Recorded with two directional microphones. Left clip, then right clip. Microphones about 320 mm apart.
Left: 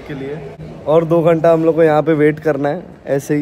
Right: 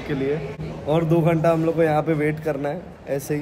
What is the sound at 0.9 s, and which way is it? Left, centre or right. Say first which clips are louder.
A man's voice: left 8 dB; left.